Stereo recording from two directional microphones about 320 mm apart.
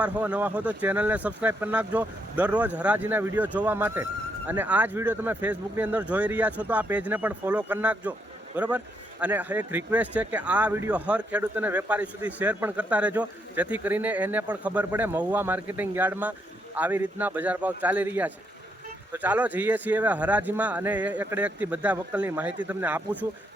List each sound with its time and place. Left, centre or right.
0.0 s speech: centre